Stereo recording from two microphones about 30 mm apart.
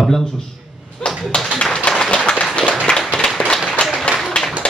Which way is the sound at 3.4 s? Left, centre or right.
Left.